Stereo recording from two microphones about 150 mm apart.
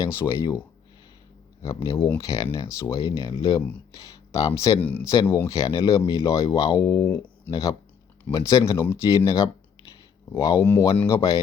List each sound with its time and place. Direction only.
0.0 s speech: 15° left (ahead or behind)
1.6 s speech: 25° left (ahead or behind)
4.8 s speech: 10° left (ahead or behind)
5.0 s speech: 20° left (ahead or behind)